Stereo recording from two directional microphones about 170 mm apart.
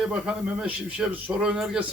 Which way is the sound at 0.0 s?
5° right (ahead or behind).